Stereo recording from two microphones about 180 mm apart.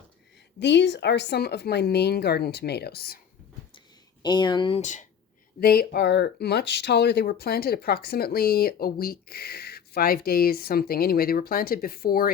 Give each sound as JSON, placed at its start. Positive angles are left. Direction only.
{"t": 0.6, "sound": "speech", "side_deg": 75}
{"t": 4.2, "sound": "speech", "side_deg": 25}
{"t": 4.8, "sound": "speech", "side_deg": 40}
{"t": 5.5, "sound": "speech", "side_deg": 60}